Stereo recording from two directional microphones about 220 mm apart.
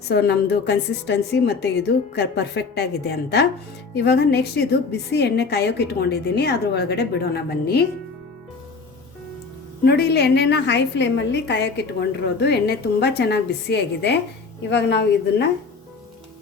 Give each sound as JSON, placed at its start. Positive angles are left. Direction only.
{"t": 0.1, "sound": "a woman's voice", "side_deg": 50}
{"t": 9.8, "sound": "a woman's voice", "side_deg": 45}